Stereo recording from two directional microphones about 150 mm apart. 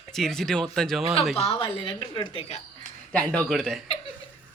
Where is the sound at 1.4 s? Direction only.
35° left (ahead or behind).